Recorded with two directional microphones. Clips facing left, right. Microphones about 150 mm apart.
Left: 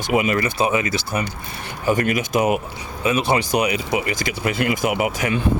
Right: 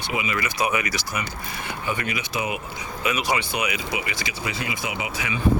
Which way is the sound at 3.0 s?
30° left (ahead or behind).